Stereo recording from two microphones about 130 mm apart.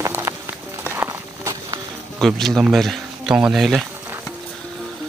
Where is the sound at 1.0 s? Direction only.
25° right (ahead or behind).